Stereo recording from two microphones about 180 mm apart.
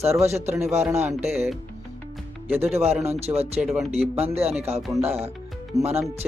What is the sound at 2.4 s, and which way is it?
Speech, 10° right (ahead or behind).